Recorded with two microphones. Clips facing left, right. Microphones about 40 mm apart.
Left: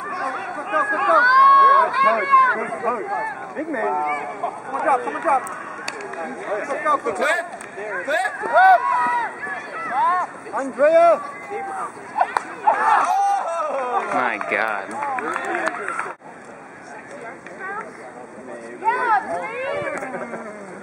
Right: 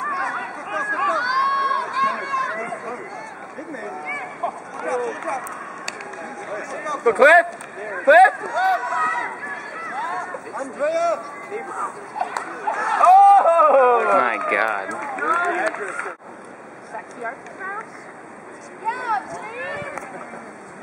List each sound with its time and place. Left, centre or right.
0.0 s a sound: centre
1.1 s run: centre
3.1 s speech: centre
4.0 s speech: centre
4.8 s speech: centre
5.5 s speech: centre
7.1 s speech: centre
7.8 s speech: centre
8.1 s speech: centre
8.4 s speech: centre
13.0 s a sound: centre
13.9 s speech: centre
17.2 s speech: centre
18.9 s speech: centre